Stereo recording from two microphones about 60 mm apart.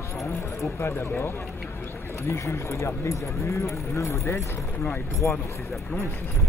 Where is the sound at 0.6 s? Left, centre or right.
Left.